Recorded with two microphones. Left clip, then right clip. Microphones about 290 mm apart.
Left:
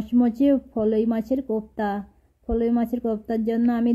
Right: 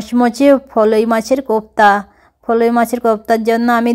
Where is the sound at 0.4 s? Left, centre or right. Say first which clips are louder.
Right 12 dB; centre.